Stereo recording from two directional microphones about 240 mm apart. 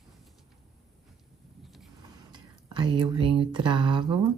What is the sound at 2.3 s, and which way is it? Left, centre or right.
Speech, centre.